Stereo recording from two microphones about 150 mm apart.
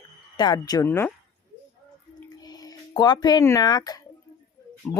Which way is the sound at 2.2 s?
25° left (ahead or behind).